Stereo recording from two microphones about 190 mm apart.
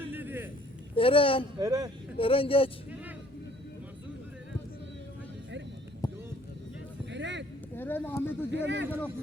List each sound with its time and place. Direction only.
0.0 s a sound: 10° right (ahead or behind)
0.9 s speech: 30° left (ahead or behind)
1.5 s speech: 20° right (ahead or behind)
2.1 s speech: 30° left (ahead or behind)
7.1 s a sound: 70° right (ahead or behind)
7.8 s speech: 10° left (ahead or behind)
8.4 s a man's voice: 70° right (ahead or behind)